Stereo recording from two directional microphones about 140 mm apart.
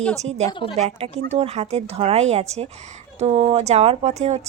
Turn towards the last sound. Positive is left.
turn(degrees=-50)  # may be behind; listen again after turning